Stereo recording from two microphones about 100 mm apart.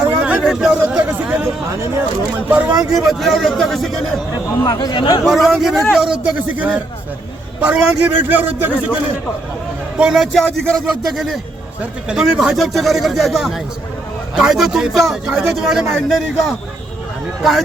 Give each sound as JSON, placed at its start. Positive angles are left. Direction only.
{"t": 0.0, "sound": "a sound", "side_deg": -10}
{"t": 2.3, "sound": "a man's voice", "side_deg": -15}
{"t": 2.9, "sound": "speech", "side_deg": 0}
{"t": 4.6, "sound": "speech", "side_deg": 40}
{"t": 5.2, "sound": "speech", "side_deg": 0}
{"t": 6.6, "sound": "a man's voice", "side_deg": -10}
{"t": 10.0, "sound": "a man's voice", "side_deg": -5}
{"t": 10.3, "sound": "speech", "side_deg": 5}